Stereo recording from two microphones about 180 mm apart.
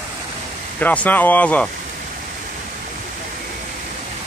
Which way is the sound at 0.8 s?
10° left (ahead or behind).